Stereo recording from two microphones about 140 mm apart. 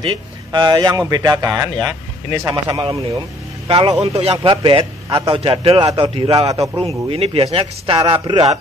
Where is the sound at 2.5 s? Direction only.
35° right (ahead or behind).